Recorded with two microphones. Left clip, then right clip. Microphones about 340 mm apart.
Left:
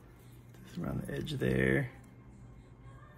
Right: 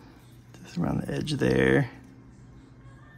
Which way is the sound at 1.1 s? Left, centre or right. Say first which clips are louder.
Right 8 dB; centre.